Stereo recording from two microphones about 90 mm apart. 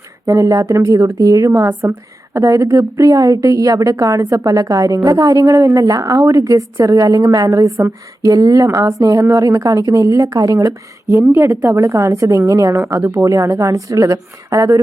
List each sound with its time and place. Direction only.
0.3 s a woman's voice: 40° right (ahead or behind)